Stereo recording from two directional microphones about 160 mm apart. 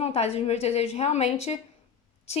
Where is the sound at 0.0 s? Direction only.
40° left (ahead or behind).